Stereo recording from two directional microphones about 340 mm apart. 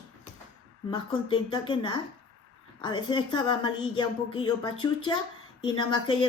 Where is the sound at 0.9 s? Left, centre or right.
Centre.